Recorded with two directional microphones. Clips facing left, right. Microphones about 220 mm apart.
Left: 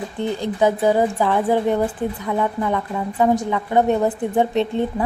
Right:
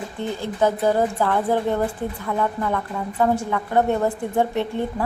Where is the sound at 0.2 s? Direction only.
15° left (ahead or behind).